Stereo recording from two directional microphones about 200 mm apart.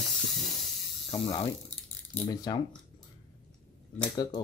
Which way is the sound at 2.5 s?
15° left (ahead or behind).